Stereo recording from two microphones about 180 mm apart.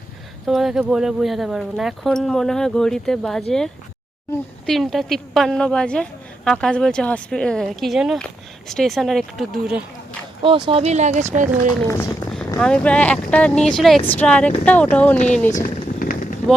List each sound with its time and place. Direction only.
0.4 s a woman's voice: centre (ahead or behind)
4.6 s a woman's voice: centre (ahead or behind)
10.4 s speech: 30° right (ahead or behind)
11.9 s speech: 15° left (ahead or behind)
15.4 s a sound: 45° left (ahead or behind)